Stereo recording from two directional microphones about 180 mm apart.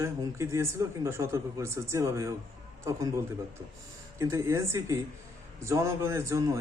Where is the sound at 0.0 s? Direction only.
15° right (ahead or behind).